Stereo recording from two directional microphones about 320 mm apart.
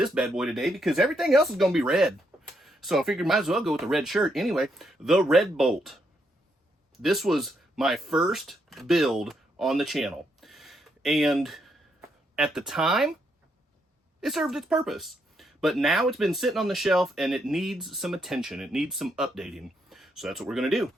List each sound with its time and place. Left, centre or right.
0.0 s speech: centre
7.0 s speech: centre
14.2 s speech: centre